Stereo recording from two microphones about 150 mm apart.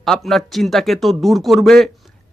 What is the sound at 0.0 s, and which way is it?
Speech, centre (ahead or behind).